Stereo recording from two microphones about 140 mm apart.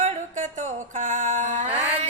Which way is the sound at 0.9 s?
65° right (ahead or behind).